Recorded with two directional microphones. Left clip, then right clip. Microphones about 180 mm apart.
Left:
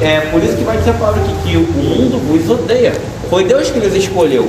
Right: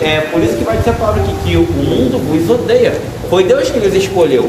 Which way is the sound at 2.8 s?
20° right (ahead or behind).